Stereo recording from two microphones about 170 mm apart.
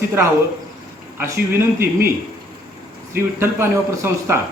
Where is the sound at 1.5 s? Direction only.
15° right (ahead or behind).